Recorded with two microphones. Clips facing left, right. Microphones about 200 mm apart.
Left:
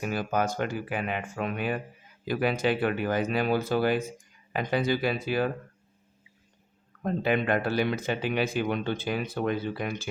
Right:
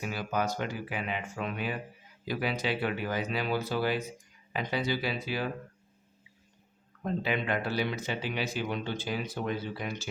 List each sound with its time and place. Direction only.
0.0 s speech: 50° left (ahead or behind)
7.0 s speech: 50° left (ahead or behind)